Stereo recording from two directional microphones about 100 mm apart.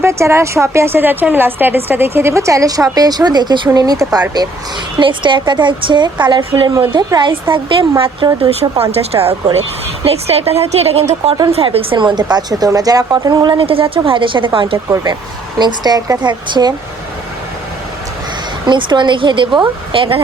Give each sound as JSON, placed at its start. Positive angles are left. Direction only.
{"t": 0.0, "sound": "a woman's voice", "side_deg": -25}
{"t": 4.9, "sound": "speech", "side_deg": -55}
{"t": 7.5, "sound": "a woman's voice", "side_deg": -60}
{"t": 8.8, "sound": "speech", "side_deg": -85}
{"t": 11.5, "sound": "a woman's voice", "side_deg": -75}
{"t": 11.9, "sound": "a woman's voice", "side_deg": -45}
{"t": 13.6, "sound": "a woman's voice", "side_deg": -65}
{"t": 15.5, "sound": "speech", "side_deg": -45}
{"t": 18.6, "sound": "a woman's voice", "side_deg": -50}